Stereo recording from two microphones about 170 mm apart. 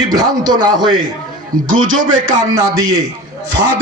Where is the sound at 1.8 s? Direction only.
50° right (ahead or behind).